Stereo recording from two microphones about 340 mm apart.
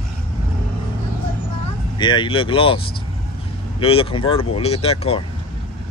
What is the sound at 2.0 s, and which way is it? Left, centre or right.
Speech, centre.